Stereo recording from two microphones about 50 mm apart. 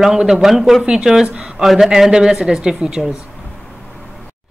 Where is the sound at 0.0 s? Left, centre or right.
Centre.